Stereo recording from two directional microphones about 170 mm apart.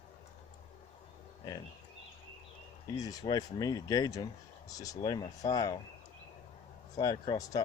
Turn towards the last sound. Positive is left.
turn(degrees=20)  # may be behind; listen again after turning